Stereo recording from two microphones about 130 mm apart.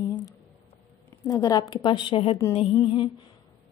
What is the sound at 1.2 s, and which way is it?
A woman's voice, 25° left (ahead or behind).